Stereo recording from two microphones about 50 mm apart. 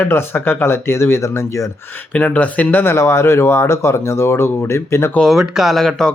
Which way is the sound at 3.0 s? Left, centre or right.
Left.